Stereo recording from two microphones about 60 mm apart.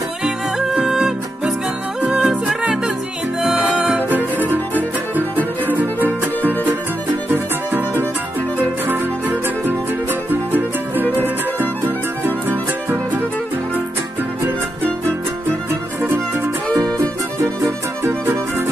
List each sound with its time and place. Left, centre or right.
0.2 s music: centre; by 6.7 s right
8.8 s music: right
16.6 s music: left